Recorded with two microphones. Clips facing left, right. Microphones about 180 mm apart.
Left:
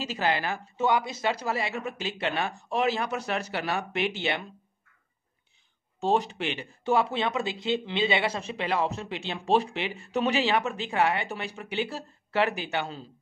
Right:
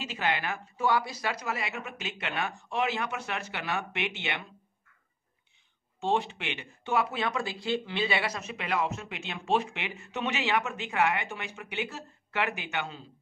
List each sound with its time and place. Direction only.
0.0 s speech: 35° left (ahead or behind)
0.8 s speech: 20° left (ahead or behind)
5.9 s speech: 40° left (ahead or behind)